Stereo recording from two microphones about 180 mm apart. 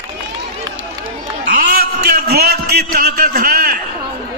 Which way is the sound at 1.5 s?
55° right (ahead or behind).